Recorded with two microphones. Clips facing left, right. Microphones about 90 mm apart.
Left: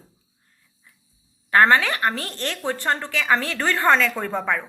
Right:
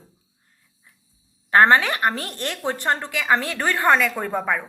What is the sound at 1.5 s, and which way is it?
A woman's voice, 20° right (ahead or behind).